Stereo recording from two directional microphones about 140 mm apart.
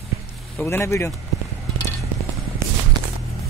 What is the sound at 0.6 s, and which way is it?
Speech, 20° left (ahead or behind).